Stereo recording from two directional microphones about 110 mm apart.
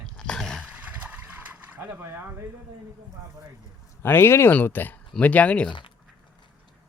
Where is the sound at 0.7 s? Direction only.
15° right (ahead or behind).